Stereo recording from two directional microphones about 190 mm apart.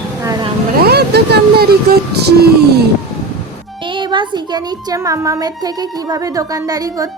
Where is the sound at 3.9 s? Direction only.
25° right (ahead or behind).